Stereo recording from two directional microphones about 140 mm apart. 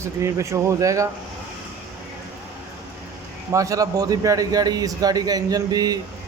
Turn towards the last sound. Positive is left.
turn(degrees=-25)  # may be behind; listen again after turning